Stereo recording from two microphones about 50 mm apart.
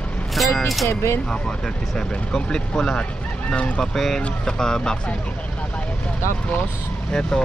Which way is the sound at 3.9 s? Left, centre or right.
Centre.